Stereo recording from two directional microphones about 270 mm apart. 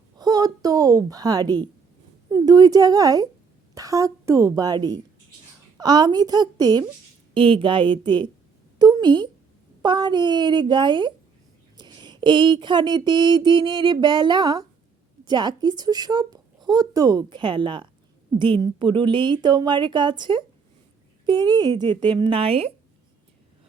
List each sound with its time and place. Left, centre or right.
0.2 s a woman's voice: centre
3.8 s a sound: centre
22.0 s a woman's voice: centre